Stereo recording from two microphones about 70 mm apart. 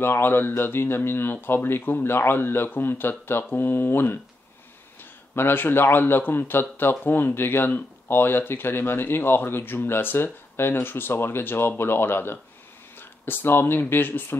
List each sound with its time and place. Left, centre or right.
0.0 s speech: left
5.3 s speech: left